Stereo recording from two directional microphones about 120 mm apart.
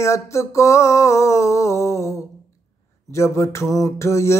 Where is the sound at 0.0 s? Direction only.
25° left (ahead or behind).